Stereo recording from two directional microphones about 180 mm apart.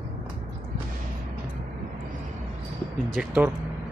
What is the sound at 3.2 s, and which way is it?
Speech, 10° right (ahead or behind).